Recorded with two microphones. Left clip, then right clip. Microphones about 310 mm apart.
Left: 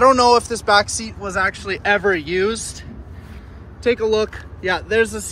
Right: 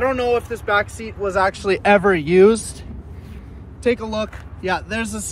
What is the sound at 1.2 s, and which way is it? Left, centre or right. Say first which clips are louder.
Speech: right 3 dB; centre.